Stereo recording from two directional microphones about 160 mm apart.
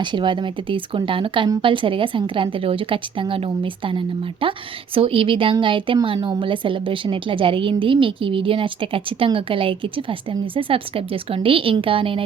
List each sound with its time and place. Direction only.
0.0 s a woman's voice: 30° right (ahead or behind)